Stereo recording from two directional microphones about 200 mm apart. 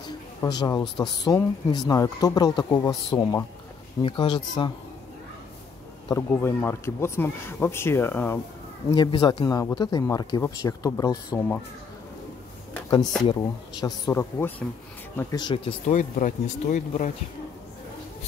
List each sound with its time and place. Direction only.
0.0 s a sound: 20° left (ahead or behind)
1.2 s speech: 20° left (ahead or behind)
6.0 s speech: 10° left (ahead or behind)
8.9 s speech: 20° left (ahead or behind)
13.3 s speech: 20° left (ahead or behind); by 17.1 s 35° left (ahead or behind)